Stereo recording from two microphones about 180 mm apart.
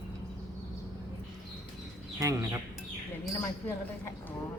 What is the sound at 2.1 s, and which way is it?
Speech, 20° right (ahead or behind).